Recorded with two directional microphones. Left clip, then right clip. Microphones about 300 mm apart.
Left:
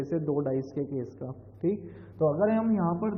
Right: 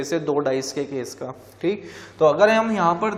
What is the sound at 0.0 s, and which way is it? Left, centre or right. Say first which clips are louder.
A man's voice: right 8 dB; centre.